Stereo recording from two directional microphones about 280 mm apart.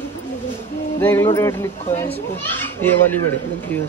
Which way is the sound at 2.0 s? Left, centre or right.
Left.